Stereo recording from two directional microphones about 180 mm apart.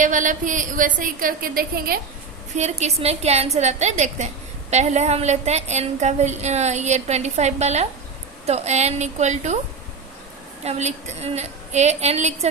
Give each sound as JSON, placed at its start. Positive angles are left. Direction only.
{"t": 0.0, "sound": "a woman's voice", "side_deg": -45}
{"t": 2.6, "sound": "a woman's voice", "side_deg": -40}
{"t": 10.6, "sound": "a woman's voice", "side_deg": -40}